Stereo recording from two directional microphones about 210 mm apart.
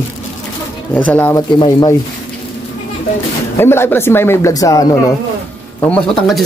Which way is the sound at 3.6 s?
10° left (ahead or behind).